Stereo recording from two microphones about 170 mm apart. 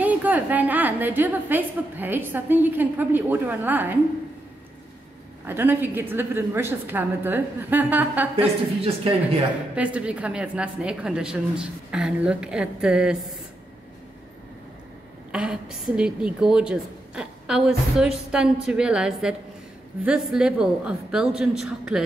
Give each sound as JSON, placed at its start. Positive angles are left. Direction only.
{"t": 0.0, "sound": "a woman's voice", "side_deg": -10}
{"t": 5.5, "sound": "a woman's voice", "side_deg": -10}
{"t": 8.4, "sound": "a woman's voice", "side_deg": -35}
{"t": 9.8, "sound": "a woman's voice", "side_deg": -5}
{"t": 15.3, "sound": "a woman's voice", "side_deg": -5}